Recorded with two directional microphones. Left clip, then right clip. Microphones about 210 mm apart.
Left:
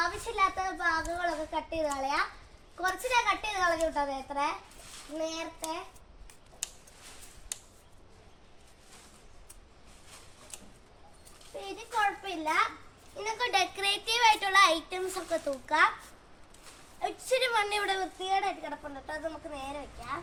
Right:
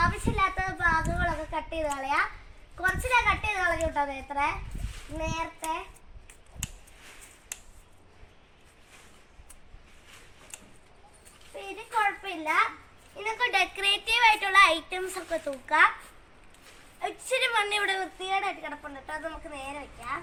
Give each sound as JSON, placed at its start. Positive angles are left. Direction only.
{"t": 0.3, "sound": "a sound", "side_deg": 0}
{"t": 2.7, "sound": "a woman's voice", "side_deg": 0}
{"t": 11.5, "sound": "a woman's voice", "side_deg": 0}
{"t": 17.0, "sound": "a woman's voice", "side_deg": -5}